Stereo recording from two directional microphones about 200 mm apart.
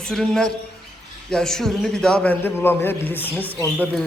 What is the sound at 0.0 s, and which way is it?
A man's voice, centre (ahead or behind).